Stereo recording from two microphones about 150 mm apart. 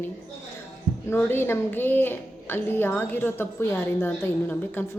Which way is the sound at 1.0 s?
15° left (ahead or behind).